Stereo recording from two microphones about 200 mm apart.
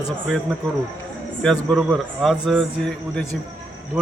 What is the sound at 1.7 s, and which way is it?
Speech, centre (ahead or behind).